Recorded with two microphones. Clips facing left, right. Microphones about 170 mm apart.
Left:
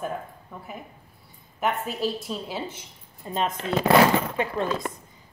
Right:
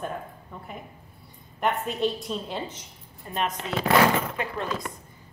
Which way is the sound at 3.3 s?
25° left (ahead or behind).